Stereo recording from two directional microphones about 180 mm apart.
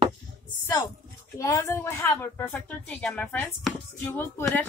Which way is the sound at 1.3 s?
15° left (ahead or behind).